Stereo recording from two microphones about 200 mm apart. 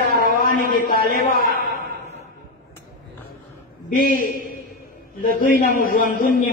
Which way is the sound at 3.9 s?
45° left (ahead or behind).